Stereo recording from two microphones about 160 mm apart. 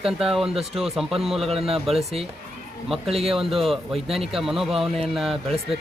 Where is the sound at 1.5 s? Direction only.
35° right (ahead or behind).